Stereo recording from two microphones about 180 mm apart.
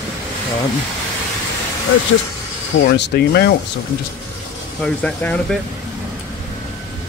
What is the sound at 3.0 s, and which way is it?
Speech, 65° left (ahead or behind).